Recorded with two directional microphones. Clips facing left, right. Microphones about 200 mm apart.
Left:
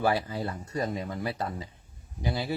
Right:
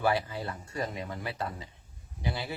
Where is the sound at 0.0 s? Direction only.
35° left (ahead or behind).